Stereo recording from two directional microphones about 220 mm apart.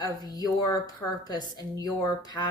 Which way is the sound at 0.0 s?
15° left (ahead or behind).